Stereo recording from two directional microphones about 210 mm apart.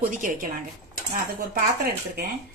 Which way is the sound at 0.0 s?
40° right (ahead or behind).